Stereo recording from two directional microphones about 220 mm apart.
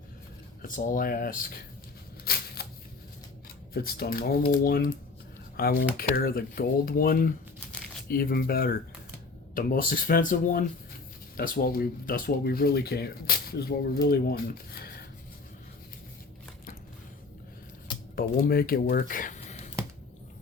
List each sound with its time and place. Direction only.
0.7 s speech: 40° left (ahead or behind)
2.6 s a sound: 45° left (ahead or behind)
3.8 s speech: 45° left (ahead or behind)
18.2 s speech: 40° left (ahead or behind)